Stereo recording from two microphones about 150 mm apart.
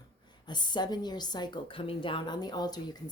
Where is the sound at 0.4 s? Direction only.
30° left (ahead or behind).